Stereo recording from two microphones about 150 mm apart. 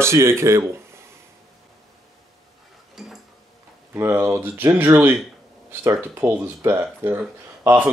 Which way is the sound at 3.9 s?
15° right (ahead or behind).